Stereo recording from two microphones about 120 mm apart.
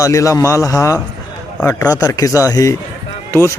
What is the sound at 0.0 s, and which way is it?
Speech, 25° left (ahead or behind).